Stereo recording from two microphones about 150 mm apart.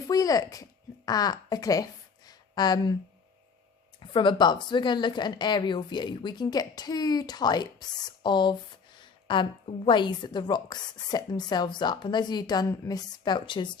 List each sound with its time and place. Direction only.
0.1 s speech: 25° left (ahead or behind)
4.0 s a woman's voice: 35° left (ahead or behind)